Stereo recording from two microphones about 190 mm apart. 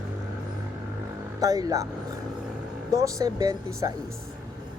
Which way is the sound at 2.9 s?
15° right (ahead or behind).